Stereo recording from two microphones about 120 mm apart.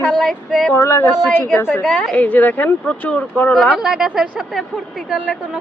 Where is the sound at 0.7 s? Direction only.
25° left (ahead or behind).